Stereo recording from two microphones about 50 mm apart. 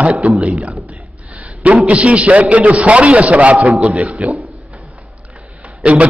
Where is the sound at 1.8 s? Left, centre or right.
Right.